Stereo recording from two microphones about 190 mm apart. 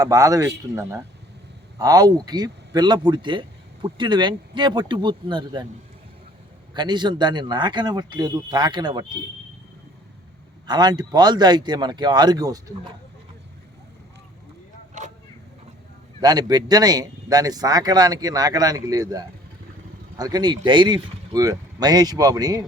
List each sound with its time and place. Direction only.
0.0 s speech: 20° right (ahead or behind)
6.7 s speech: 25° right (ahead or behind)
10.7 s speech: 20° right (ahead or behind)
16.2 s speech: 20° right (ahead or behind)